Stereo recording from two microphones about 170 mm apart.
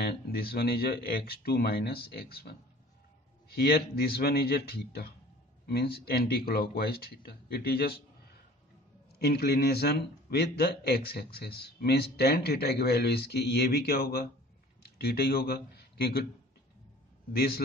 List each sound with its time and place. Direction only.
0.0 s speech: 65° left (ahead or behind)
9.2 s a man's voice: 70° left (ahead or behind)
17.3 s a man's voice: 65° left (ahead or behind)